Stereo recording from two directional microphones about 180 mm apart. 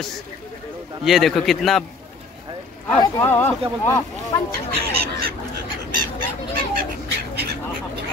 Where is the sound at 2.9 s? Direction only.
10° left (ahead or behind).